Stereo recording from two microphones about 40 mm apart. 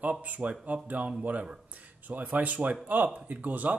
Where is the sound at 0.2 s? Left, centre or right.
Right.